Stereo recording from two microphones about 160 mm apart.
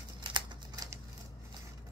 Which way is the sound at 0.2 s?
30° right (ahead or behind).